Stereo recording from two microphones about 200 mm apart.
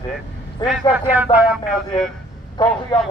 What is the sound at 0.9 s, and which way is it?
Speech, 5° right (ahead or behind).